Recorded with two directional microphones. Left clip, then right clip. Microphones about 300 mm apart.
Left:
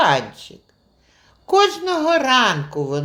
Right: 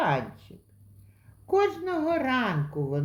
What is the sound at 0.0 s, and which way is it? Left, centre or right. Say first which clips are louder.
Speech: left 10 dB; centre.